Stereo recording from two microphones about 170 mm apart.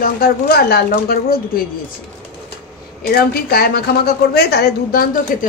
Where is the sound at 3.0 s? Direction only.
65° left (ahead or behind).